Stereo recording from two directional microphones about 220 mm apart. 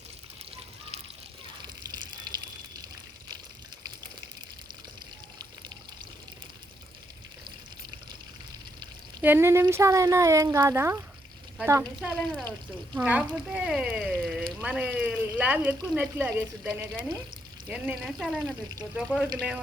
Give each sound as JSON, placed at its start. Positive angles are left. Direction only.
{"t": 1.6, "sound": "water", "side_deg": -20}
{"t": 8.8, "sound": "speech", "side_deg": -10}
{"t": 11.9, "sound": "speech", "side_deg": 0}